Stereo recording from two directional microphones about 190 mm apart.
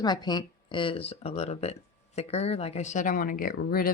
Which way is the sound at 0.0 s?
20° left (ahead or behind).